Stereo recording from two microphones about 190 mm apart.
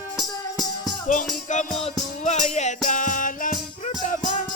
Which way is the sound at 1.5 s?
40° left (ahead or behind).